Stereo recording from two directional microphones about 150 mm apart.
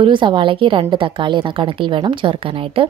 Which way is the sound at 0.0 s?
35° right (ahead or behind).